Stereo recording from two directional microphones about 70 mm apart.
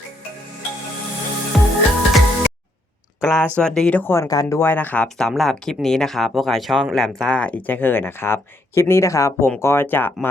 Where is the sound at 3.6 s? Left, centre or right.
Centre.